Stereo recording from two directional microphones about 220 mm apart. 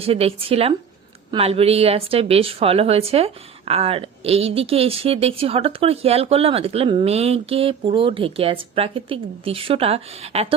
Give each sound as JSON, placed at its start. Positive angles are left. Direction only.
{"t": 0.0, "sound": "a woman's voice", "side_deg": -25}